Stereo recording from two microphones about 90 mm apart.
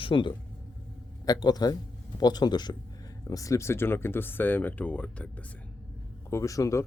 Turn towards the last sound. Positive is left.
turn(degrees=35)  # may be behind; listen again after turning